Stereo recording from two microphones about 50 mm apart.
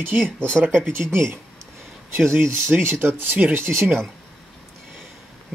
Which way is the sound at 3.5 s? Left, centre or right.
Right.